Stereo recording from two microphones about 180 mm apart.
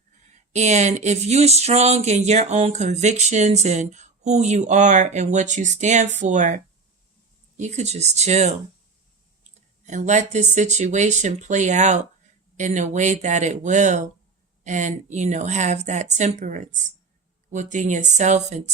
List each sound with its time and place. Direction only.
0.3 s speech: 40° right (ahead or behind)
9.8 s speech: 40° right (ahead or behind)